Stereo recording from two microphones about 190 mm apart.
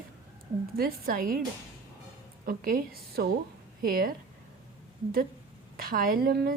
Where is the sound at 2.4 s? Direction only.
50° right (ahead or behind).